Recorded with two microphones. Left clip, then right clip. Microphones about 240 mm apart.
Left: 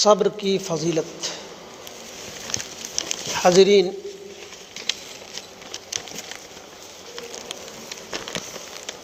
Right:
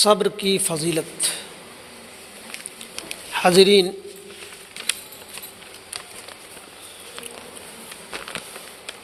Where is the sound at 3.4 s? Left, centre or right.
Right.